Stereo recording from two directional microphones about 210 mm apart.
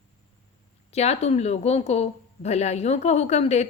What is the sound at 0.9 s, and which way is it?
A woman's voice, 30° left (ahead or behind).